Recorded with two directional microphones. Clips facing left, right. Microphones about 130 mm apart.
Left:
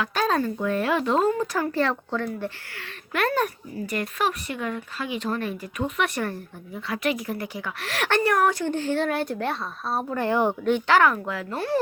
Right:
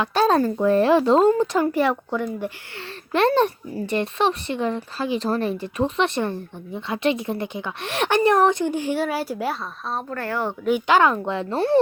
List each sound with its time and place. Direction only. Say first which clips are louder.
0.0 s speech: right 5 dB; 30° right (ahead or behind)
1.7 s speech: right 3 dB; 15° right (ahead or behind)
3.1 s a child's voice: right 6 dB; 30° right (ahead or behind); by 9.6 s 5° right (ahead or behind)
9.9 s speech: left 3 dB; 10° left (ahead or behind)
10.6 s speech: right 1 dB; 5° right (ahead or behind)
10.8 s a child's voice: right 3 dB; 20° right (ahead or behind)